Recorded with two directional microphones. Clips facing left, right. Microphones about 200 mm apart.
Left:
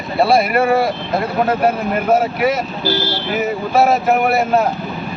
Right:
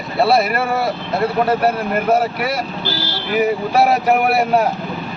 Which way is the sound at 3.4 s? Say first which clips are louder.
Even; 10° right (ahead or behind).